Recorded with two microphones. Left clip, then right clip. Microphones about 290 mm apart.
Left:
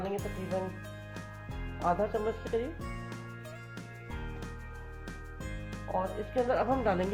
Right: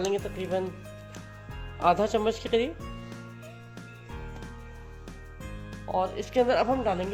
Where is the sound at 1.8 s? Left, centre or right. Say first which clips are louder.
Right 6 dB; right.